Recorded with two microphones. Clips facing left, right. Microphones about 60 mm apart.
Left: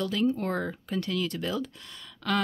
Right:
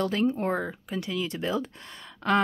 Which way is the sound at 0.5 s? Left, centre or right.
Centre.